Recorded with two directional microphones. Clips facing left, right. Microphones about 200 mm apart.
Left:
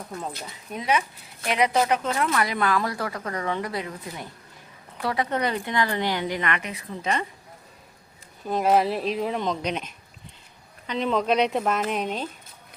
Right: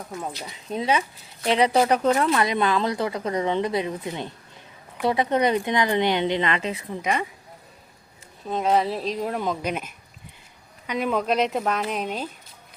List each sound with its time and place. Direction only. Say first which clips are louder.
0.4 s a woman's voice: right 4 dB; 25° right (ahead or behind)
2.3 s a woman's voice: right 2 dB; 20° right (ahead or behind)
7.0 s speech: right 1 dB; 10° right (ahead or behind)
8.4 s a woman's voice: left 1 dB; 5° left (ahead or behind)